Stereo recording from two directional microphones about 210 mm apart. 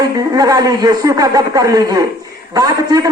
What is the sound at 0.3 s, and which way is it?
A man's voice, 20° right (ahead or behind).